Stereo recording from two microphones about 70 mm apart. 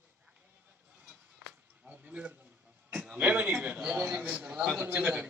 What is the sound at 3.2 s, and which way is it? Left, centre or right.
A man's voice, right.